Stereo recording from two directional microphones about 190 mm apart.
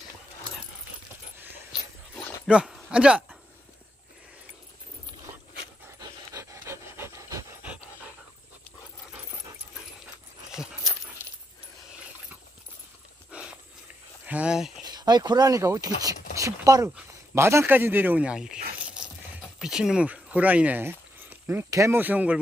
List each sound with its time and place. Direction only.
2.1 s dog: 10° left (ahead or behind)
2.5 s speech: 5° right (ahead or behind)
5.9 s pant: 15° right (ahead or behind)
10.5 s dog: 5° right (ahead or behind)
13.3 s dog: 5° right (ahead or behind)
14.2 s a sound: 5° right (ahead or behind)
14.9 s speech: 20° right (ahead or behind); by 18.6 s 5° right (ahead or behind)
19.6 s speech: 5° right (ahead or behind)